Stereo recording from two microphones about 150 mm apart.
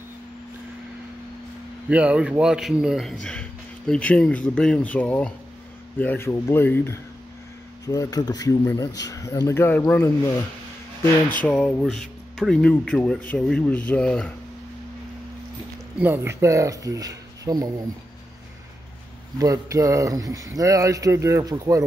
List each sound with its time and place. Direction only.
1.9 s a man's voice: 10° right (ahead or behind); by 10.3 s 15° left (ahead or behind)
11.5 s a man's voice: centre (ahead or behind)
16.0 s speech: 15° right (ahead or behind)
19.3 s speech: 25° right (ahead or behind)